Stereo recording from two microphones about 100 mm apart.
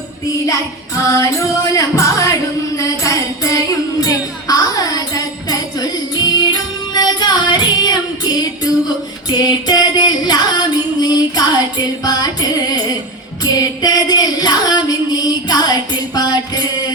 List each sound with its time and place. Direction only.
1.0 s music: 35° left (ahead or behind)